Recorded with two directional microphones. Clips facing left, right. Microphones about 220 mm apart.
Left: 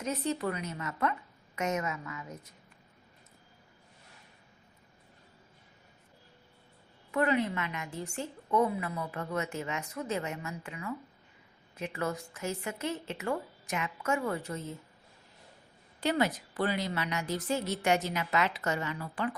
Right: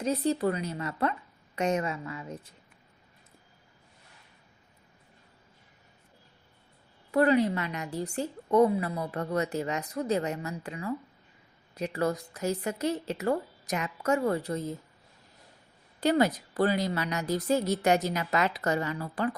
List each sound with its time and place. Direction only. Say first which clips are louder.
0.0 s a woman's voice: right 5 dB; 35° right (ahead or behind)
7.1 s a woman's voice: right 5 dB; 35° right (ahead or behind)
16.0 s a woman's voice: right 5 dB; 40° right (ahead or behind)